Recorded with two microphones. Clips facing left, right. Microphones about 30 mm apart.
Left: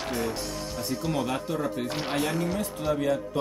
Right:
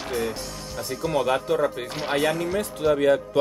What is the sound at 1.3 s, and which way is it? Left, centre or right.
Speech, right.